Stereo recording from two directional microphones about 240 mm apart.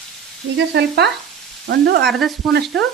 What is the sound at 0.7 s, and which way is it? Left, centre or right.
Frying, right.